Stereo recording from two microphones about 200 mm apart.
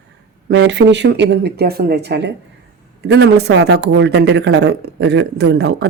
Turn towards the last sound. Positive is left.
turn(degrees=-55)  # may be behind; listen again after turning